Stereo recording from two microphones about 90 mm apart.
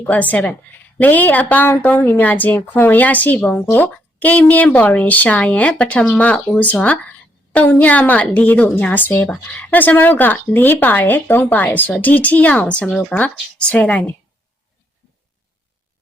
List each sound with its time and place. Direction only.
0.0 s a woman's voice: 15° left (ahead or behind)